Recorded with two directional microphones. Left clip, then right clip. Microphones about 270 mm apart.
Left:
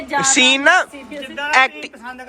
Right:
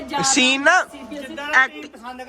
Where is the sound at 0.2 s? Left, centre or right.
Centre.